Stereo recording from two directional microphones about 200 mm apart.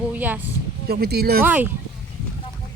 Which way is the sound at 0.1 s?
10° right (ahead or behind).